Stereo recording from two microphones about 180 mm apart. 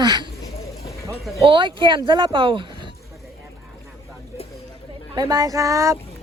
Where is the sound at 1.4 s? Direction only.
25° right (ahead or behind).